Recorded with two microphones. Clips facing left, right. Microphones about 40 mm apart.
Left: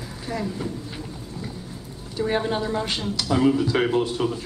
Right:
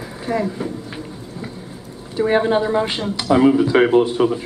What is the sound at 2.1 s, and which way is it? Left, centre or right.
Speech, right.